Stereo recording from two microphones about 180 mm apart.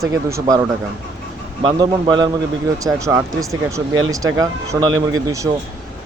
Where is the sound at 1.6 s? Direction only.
25° right (ahead or behind).